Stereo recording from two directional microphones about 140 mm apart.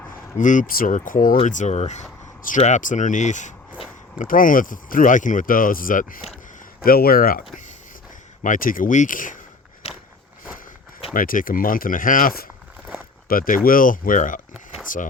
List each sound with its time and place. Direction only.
0.3 s speech: 65° left (ahead or behind)
1.5 s speech: 60° left (ahead or behind)
4.2 s speech: 75° left (ahead or behind)
6.8 s speech: 90° left
8.4 s speech: 80° left
11.1 s speech: 85° left
13.2 s speech: 90° left; by 15.1 s 75° left (ahead or behind)